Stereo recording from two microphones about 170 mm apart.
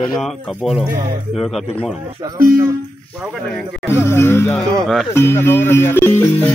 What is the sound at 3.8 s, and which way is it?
Speech, 15° left (ahead or behind).